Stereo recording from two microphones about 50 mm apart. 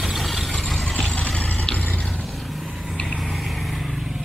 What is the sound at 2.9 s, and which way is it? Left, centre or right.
Vehicle, centre.